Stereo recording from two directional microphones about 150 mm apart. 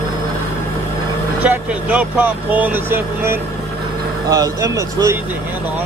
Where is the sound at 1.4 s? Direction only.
10° right (ahead or behind).